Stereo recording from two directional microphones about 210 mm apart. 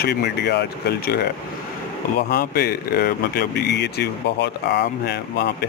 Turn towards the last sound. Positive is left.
turn(degrees=50)  # may be behind; listen again after turning